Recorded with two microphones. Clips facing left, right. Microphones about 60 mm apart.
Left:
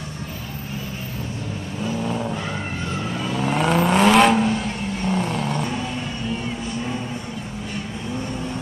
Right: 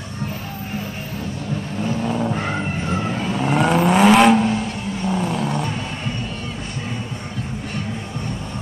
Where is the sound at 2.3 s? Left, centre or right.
Right.